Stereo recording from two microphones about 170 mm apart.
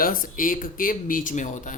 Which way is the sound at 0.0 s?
55° left (ahead or behind).